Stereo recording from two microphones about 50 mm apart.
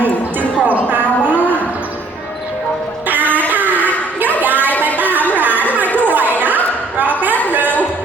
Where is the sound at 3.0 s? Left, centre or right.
Right.